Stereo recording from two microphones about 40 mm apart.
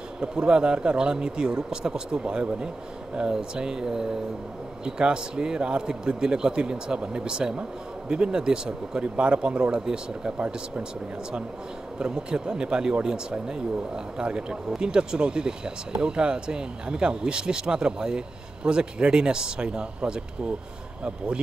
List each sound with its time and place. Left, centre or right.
0.5 s speech: right
9.0 s speech: right
12.0 s speech: right